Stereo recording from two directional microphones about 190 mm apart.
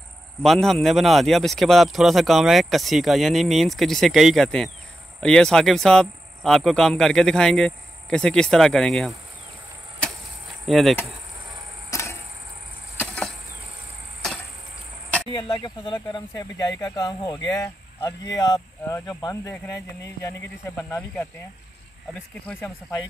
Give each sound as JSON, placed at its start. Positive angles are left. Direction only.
{"t": 0.4, "sound": "speech", "side_deg": 0}
{"t": 10.7, "sound": "speech", "side_deg": 0}
{"t": 11.9, "sound": "a sound", "side_deg": 15}
{"t": 15.3, "sound": "speech", "side_deg": 25}